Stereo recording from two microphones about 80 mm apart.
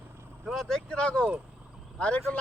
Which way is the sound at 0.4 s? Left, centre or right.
Centre.